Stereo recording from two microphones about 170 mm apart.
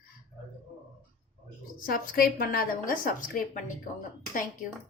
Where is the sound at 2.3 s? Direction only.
60° left (ahead or behind).